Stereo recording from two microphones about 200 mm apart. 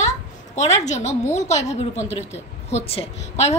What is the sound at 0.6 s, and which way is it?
A woman's voice, 35° left (ahead or behind).